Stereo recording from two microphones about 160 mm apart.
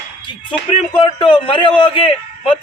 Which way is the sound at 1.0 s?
30° left (ahead or behind).